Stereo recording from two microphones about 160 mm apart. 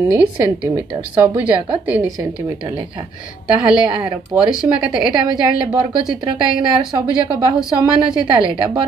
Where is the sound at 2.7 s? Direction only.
35° right (ahead or behind).